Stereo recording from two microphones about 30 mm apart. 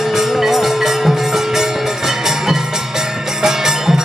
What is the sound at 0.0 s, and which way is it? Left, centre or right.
Music, centre.